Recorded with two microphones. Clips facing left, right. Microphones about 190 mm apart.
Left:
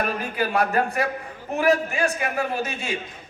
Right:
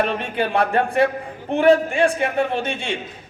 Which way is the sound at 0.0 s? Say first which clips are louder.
Right 4 dB; 30° right (ahead or behind).